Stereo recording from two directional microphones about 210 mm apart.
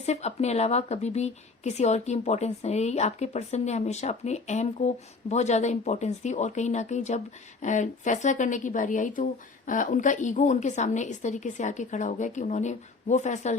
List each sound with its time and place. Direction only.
0.0 s a woman's voice: 30° left (ahead or behind)